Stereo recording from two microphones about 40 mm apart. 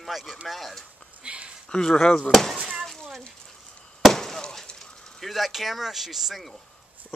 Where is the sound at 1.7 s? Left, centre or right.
Centre.